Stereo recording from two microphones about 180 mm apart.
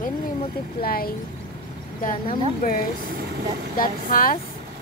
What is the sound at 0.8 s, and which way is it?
A woman's voice, 55° left (ahead or behind).